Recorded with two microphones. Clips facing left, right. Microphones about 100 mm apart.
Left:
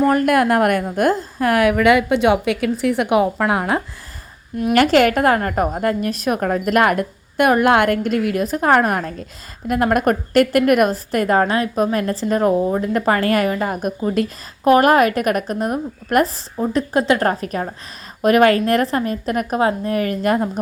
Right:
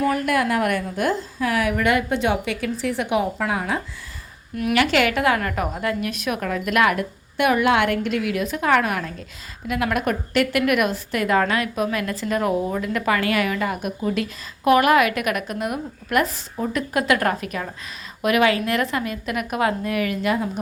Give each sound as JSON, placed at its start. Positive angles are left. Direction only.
{"t": 0.1, "sound": "a woman's voice", "side_deg": 50}
{"t": 4.7, "sound": "a woman's voice", "side_deg": 45}